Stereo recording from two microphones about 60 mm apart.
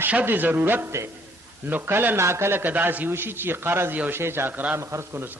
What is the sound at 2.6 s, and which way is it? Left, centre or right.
A man's voice, right.